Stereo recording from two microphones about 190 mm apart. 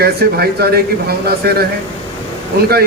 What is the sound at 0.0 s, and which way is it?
Speech, 55° right (ahead or behind).